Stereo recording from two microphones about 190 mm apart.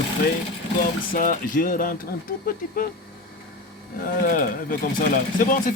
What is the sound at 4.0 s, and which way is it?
Speech, 45° left (ahead or behind).